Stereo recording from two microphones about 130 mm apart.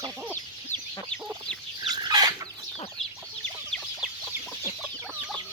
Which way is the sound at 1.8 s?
35° right (ahead or behind).